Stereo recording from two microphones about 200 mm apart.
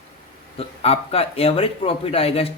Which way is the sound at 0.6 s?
30° left (ahead or behind).